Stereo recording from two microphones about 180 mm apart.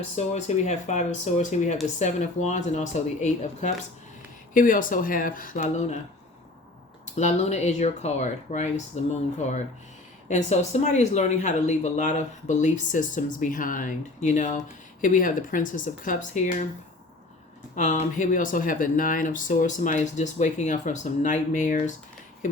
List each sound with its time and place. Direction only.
0.2 s speech: 40° left (ahead or behind)
7.2 s speech: 40° left (ahead or behind)
10.2 s speech: 40° left (ahead or behind)
17.7 s speech: 40° left (ahead or behind)